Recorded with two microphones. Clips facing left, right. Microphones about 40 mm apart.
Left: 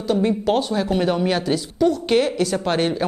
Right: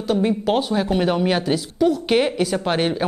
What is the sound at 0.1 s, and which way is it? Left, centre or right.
Speech, centre.